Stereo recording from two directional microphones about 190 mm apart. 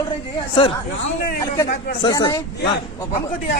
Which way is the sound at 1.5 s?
20° left (ahead or behind).